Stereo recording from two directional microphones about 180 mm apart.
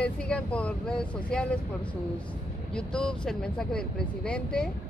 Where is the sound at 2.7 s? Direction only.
5° left (ahead or behind).